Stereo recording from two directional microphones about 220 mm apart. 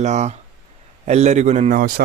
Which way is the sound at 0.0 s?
30° right (ahead or behind).